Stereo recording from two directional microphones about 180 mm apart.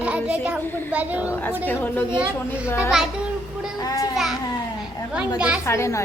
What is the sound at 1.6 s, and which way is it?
Speech, 10° left (ahead or behind).